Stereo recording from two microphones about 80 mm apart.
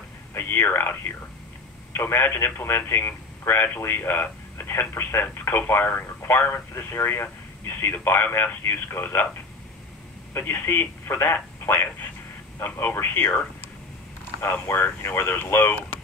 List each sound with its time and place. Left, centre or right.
0.3 s speech: left
10.3 s speech: left
14.4 s speech: left